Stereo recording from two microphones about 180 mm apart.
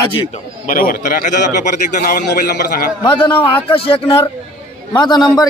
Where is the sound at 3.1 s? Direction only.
25° left (ahead or behind).